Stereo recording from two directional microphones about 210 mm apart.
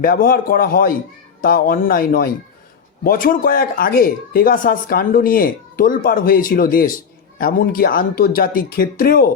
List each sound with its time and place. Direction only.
0.0 s speech: 45° left (ahead or behind)